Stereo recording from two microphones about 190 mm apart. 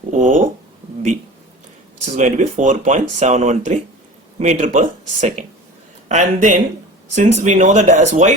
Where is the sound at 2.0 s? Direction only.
40° right (ahead or behind).